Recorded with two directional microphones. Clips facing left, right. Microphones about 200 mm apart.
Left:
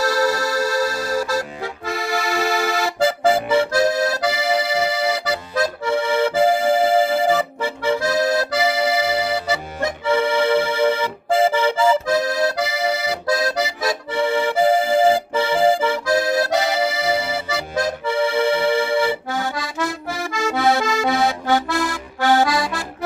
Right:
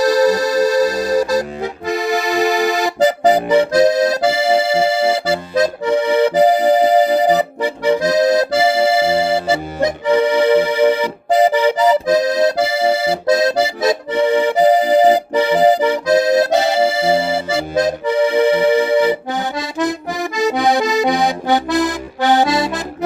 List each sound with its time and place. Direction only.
0.0 s accordion: 15° right (ahead or behind)
10.1 s accordion: 15° right (ahead or behind)